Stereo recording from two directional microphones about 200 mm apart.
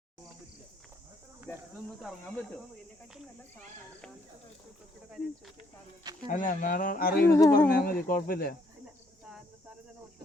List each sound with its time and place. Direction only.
2.0 s speech: centre (ahead or behind)
6.2 s speech: 40° left (ahead or behind)
7.3 s speech: 15° left (ahead or behind)
7.7 s speech: 45° left (ahead or behind)